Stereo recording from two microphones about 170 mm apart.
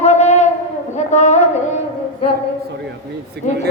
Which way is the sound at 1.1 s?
45° left (ahead or behind).